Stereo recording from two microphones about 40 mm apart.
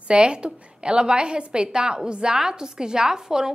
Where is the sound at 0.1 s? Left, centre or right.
Right.